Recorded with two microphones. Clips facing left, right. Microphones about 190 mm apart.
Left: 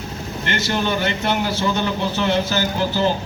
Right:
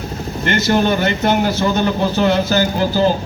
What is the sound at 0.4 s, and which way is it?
Speech, 50° right (ahead or behind).